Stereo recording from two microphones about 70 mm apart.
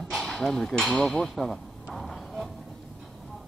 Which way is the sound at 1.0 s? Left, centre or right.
Centre.